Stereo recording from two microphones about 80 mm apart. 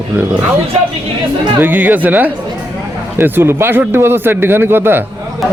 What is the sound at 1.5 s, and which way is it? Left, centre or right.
Speech, right.